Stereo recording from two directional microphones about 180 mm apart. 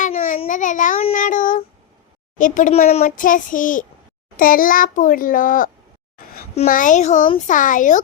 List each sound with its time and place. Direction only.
0.0 s a sound: 45° left (ahead or behind)
0.4 s a child's voice: 45° left (ahead or behind)
1.1 s child singing: 45° left (ahead or behind)
2.4 s a child's voice: 45° left (ahead or behind)